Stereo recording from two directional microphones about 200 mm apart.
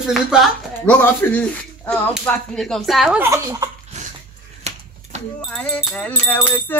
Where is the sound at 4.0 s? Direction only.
35° right (ahead or behind).